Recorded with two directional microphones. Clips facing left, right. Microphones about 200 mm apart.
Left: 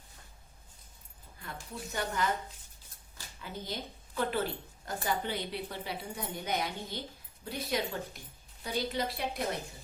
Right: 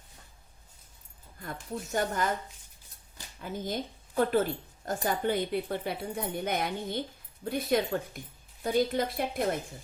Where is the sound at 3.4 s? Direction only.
50° right (ahead or behind).